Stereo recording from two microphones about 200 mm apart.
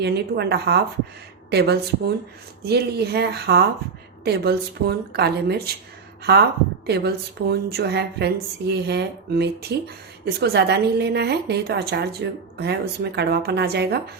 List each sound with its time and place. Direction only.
0.0 s speech: 55° right (ahead or behind)
6.8 s speech: 55° right (ahead or behind)